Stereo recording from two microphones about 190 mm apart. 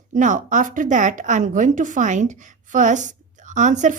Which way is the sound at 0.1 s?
40° right (ahead or behind).